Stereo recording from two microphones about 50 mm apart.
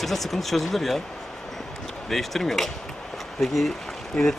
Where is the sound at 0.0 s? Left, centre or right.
Centre.